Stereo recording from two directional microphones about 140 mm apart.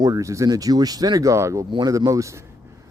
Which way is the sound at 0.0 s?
25° right (ahead or behind).